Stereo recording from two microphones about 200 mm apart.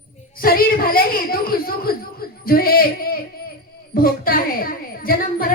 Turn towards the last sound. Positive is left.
turn(degrees=45)  # may be behind; listen again after turning